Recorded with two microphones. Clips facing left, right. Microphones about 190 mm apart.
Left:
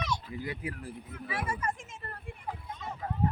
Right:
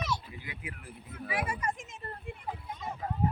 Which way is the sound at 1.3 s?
15° right (ahead or behind).